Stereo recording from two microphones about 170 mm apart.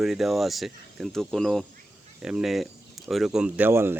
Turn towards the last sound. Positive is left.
turn(degrees=-15)  # may be behind; listen again after turning